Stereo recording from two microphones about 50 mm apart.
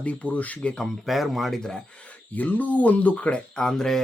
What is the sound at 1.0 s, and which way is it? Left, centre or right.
Speech, centre.